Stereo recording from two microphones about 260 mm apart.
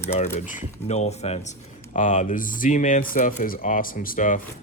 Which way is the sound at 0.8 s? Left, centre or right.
Left.